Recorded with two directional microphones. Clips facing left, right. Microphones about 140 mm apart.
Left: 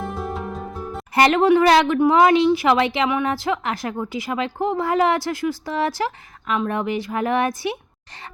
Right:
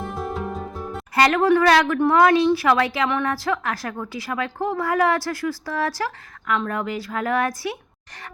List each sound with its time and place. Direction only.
0.0 s music: centre (ahead or behind)
1.1 s a woman's voice: 25° left (ahead or behind)